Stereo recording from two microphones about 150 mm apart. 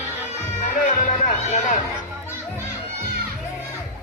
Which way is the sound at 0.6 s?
55° left (ahead or behind).